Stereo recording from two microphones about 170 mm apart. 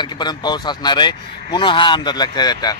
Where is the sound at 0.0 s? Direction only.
25° left (ahead or behind).